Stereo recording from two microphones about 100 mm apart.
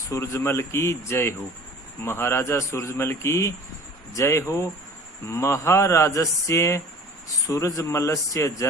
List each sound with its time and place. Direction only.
0.1 s a man's voice: 30° left (ahead or behind)